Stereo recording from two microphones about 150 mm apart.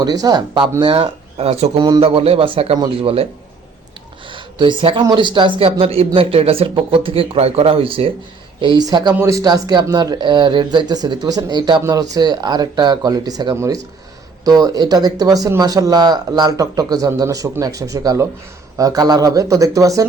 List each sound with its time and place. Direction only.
0.0 s speech: 25° right (ahead or behind)
4.3 s speech: 35° right (ahead or behind)